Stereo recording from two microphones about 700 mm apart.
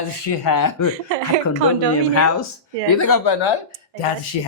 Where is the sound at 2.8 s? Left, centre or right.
Left.